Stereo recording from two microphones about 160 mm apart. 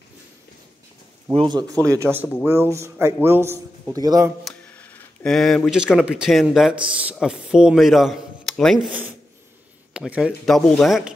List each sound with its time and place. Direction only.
1.3 s a man's voice: 30° right (ahead or behind)
4.6 s a sound: 10° left (ahead or behind)
5.9 s speech: 5° right (ahead or behind)
9.9 s a man's voice: 5° right (ahead or behind)
10.5 s speech: 5° left (ahead or behind)